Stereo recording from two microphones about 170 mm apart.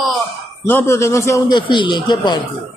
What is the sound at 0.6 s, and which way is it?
A woman's voice, 15° left (ahead or behind).